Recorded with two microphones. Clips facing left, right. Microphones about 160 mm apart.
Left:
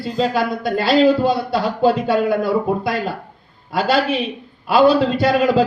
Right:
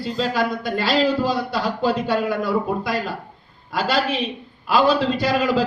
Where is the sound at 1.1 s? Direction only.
25° left (ahead or behind).